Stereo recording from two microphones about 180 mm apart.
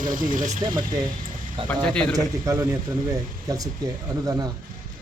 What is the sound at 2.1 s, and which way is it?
A man's voice, 15° right (ahead or behind).